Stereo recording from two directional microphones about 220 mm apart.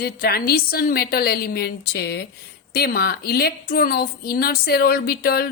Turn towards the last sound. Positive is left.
turn(degrees=45)  # may be behind; listen again after turning